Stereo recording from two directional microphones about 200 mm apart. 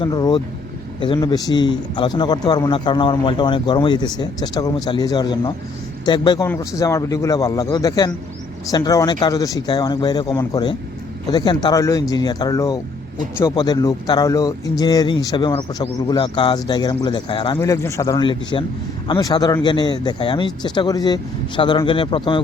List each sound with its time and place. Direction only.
0.0 s a man's voice: 20° left (ahead or behind)